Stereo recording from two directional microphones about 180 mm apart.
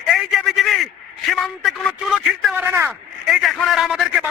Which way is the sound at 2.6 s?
15° right (ahead or behind).